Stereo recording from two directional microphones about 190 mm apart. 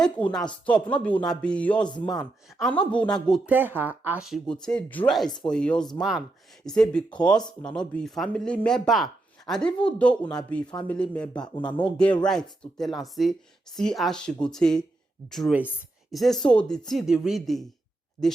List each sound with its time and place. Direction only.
0.3 s speech: 5° left (ahead or behind)
3.5 s speech: 10° right (ahead or behind); by 11.4 s 5° left (ahead or behind)
11.5 s speech: 25° left (ahead or behind)
12.2 s speech: 5° left (ahead or behind)